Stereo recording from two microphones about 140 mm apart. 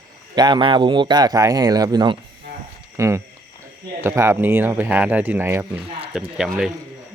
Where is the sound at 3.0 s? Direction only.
20° right (ahead or behind).